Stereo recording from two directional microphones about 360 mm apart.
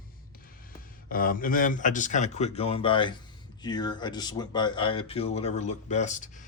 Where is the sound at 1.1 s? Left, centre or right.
Left.